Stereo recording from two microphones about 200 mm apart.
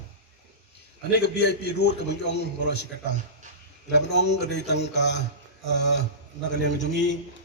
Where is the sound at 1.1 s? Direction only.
60° left (ahead or behind).